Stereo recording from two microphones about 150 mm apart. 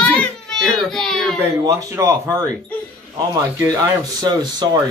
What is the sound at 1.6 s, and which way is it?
Speech, 25° right (ahead or behind).